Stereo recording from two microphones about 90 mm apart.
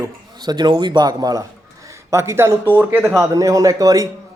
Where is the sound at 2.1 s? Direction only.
30° right (ahead or behind).